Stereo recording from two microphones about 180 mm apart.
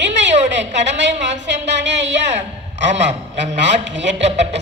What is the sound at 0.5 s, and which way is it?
A woman's voice, 80° right.